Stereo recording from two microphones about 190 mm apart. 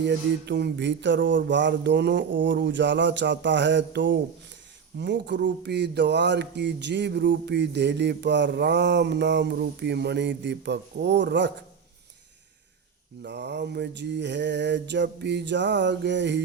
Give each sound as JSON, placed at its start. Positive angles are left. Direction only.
{"t": 0.0, "sound": "a sound", "side_deg": -65}
{"t": 4.9, "sound": "speech", "side_deg": -65}
{"t": 13.2, "sound": "speech", "side_deg": -65}